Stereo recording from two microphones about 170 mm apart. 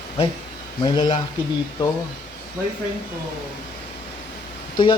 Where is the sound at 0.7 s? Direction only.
25° left (ahead or behind).